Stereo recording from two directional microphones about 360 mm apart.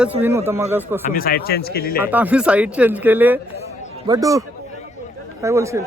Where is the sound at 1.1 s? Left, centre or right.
Left.